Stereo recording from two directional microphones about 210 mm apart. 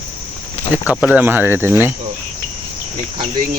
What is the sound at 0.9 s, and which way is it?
Speech, 5° right (ahead or behind).